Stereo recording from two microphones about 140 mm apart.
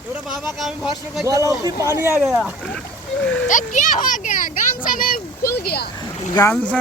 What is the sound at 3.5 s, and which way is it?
Speech, 65° left (ahead or behind).